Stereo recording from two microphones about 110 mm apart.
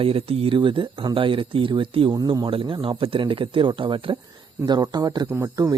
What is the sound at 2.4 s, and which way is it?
A man's voice, 50° right (ahead or behind).